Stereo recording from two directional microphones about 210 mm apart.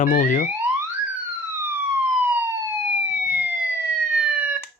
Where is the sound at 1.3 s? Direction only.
10° right (ahead or behind).